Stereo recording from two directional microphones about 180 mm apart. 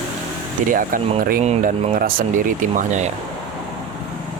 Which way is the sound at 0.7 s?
50° right (ahead or behind).